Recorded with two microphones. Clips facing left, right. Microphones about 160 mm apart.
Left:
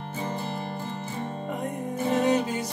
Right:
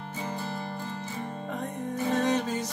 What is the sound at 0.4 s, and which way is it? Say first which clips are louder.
Music: left 2 dB; 20° left (ahead or behind).